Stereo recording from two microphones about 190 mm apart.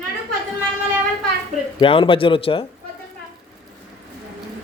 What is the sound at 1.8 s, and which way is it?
Speech, 30° left (ahead or behind).